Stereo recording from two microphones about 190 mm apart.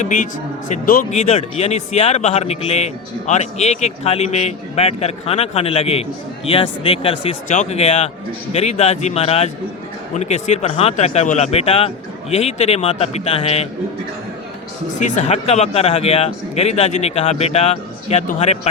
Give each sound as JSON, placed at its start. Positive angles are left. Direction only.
{"t": 0.0, "sound": "a man's voice", "side_deg": 45}
{"t": 14.9, "sound": "speech", "side_deg": 40}